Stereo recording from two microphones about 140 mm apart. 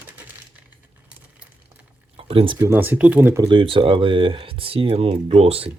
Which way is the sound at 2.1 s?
40° right (ahead or behind).